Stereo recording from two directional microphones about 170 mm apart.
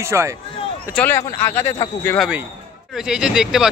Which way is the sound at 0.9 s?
10° left (ahead or behind).